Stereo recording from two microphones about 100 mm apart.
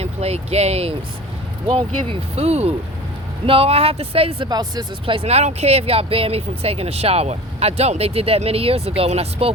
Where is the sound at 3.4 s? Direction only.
70° right (ahead or behind).